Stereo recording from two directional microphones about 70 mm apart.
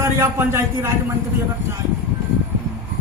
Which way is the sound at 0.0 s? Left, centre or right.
Right.